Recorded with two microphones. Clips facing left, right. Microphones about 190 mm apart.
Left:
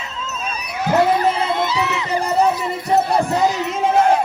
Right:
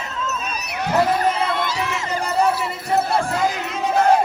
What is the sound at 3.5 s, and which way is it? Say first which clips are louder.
Battle cry: left 4 dB; 50° right (ahead or behind).